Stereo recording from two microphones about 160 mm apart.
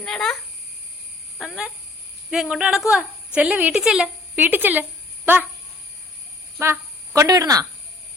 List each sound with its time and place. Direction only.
0.0 s speech: 5° left (ahead or behind)
1.4 s a woman's voice: 5° right (ahead or behind)
6.6 s speech: 20° right (ahead or behind)